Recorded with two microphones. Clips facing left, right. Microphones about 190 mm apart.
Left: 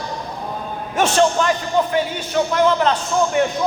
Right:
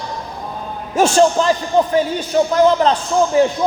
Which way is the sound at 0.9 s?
30° right (ahead or behind).